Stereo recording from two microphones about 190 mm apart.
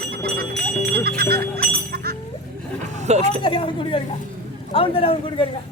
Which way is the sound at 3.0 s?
35° right (ahead or behind).